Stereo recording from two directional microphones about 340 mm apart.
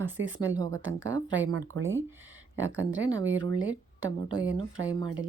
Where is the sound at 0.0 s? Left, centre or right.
Right.